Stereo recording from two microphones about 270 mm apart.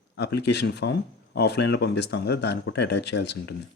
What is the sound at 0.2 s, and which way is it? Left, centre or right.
Speech, left.